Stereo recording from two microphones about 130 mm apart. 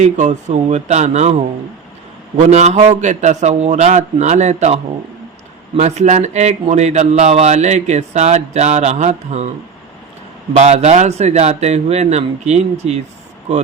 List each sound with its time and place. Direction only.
0.0 s speech: 60° right (ahead or behind)
10.5 s speech: 60° right (ahead or behind)